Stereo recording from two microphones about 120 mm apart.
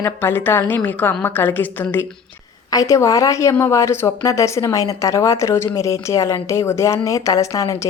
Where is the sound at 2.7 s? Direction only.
30° left (ahead or behind).